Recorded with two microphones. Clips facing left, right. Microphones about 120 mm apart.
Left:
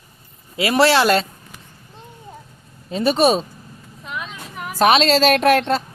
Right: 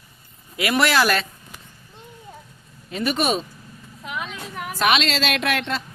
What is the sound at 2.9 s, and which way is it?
Speech, 30° left (ahead or behind).